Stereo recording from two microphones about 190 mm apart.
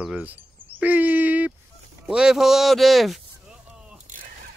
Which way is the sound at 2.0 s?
5° right (ahead or behind).